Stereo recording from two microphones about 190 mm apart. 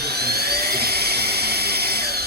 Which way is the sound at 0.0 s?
55° right (ahead or behind).